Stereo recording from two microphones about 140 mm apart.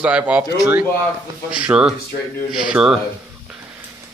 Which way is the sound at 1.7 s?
5° right (ahead or behind).